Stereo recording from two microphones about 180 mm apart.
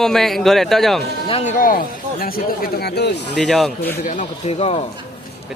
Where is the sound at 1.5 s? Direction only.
50° left (ahead or behind); by 3.4 s 70° left (ahead or behind).